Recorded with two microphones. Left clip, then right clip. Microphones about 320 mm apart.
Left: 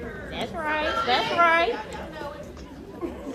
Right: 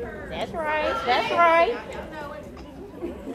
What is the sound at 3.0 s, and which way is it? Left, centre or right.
Chatter, left.